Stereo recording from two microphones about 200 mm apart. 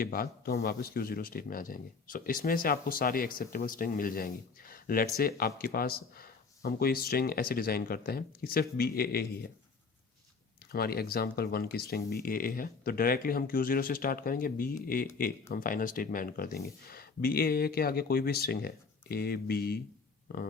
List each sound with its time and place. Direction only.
0.0 s a man's voice: 50° left (ahead or behind)
10.7 s a man's voice: 50° left (ahead or behind)